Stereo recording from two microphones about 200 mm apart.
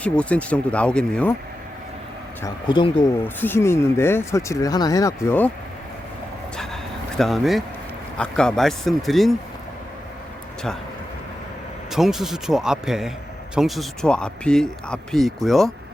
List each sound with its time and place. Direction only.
0.0 s speech: 5° left (ahead or behind)
2.4 s speech: 20° left (ahead or behind)
3.2 s speech: 10° left (ahead or behind)
7.2 s speech: centre (ahead or behind)
11.9 s speech: centre (ahead or behind)